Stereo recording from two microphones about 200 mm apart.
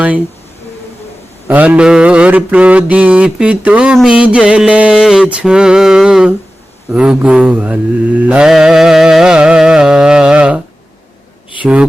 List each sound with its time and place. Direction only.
1.5 s mantra: 10° right (ahead or behind)
11.6 s speech: 5° right (ahead or behind)